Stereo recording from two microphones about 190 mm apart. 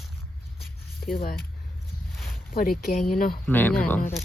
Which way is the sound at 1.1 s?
55° left (ahead or behind).